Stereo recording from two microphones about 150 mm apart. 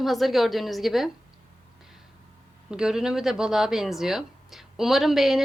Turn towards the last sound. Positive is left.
turn(degrees=0)  # may be behind; listen again after turning